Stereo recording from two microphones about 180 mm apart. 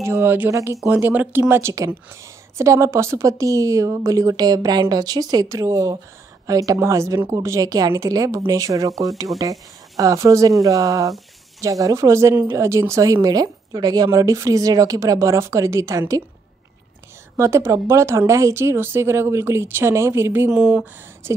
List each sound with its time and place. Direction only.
0.0 s a woman's voice: 15° right (ahead or behind)
17.4 s a woman's voice: 15° right (ahead or behind)